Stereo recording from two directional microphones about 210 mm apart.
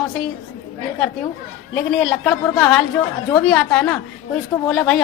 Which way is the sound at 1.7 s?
Centre (ahead or behind).